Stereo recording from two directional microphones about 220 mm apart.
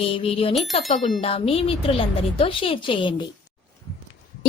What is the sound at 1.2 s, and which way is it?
A woman's voice, 25° left (ahead or behind).